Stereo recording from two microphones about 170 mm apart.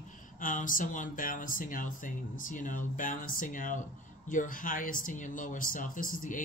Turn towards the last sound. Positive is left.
turn(degrees=55)  # may be behind; listen again after turning